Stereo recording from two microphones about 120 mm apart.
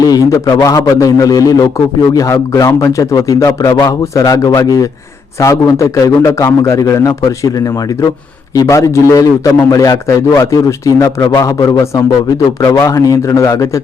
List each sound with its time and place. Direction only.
0.0 s a man's voice: 30° left (ahead or behind)